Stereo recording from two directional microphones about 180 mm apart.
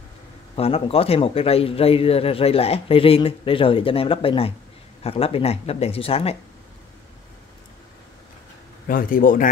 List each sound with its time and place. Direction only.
0.6 s speech: 35° left (ahead or behind)
8.8 s a man's voice: 50° left (ahead or behind)